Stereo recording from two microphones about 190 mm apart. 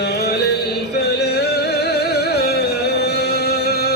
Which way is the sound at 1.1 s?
60° left (ahead or behind).